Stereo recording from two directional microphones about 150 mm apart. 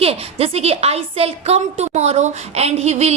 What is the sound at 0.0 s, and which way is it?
A woman's voice, 40° right (ahead or behind).